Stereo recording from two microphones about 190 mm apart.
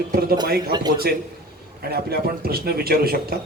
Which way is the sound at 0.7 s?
25° right (ahead or behind).